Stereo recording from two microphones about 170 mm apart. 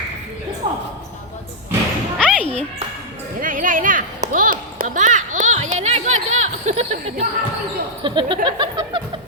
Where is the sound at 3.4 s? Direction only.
55° right (ahead or behind).